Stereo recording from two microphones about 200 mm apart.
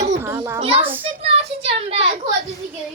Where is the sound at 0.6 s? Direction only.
30° right (ahead or behind).